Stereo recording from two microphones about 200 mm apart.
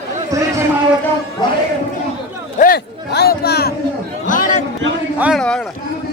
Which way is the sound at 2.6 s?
50° left (ahead or behind).